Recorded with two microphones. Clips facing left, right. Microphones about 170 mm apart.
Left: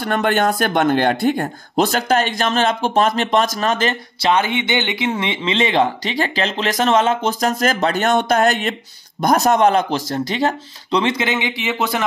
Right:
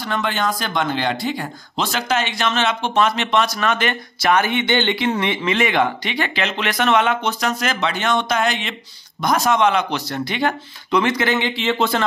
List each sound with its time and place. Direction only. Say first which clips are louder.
0.0 s a man's voice: left 5 dB; 55° left (ahead or behind); by 3.9 s 35° left (ahead or behind)
3.9 s speech: left 1 dB; 25° left (ahead or behind)
7.2 s a man's voice: left 4 dB; 40° left (ahead or behind); by 12.0 s 15° left (ahead or behind)